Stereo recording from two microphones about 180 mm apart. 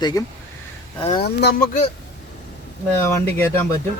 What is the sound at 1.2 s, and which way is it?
Speech, 65° left (ahead or behind).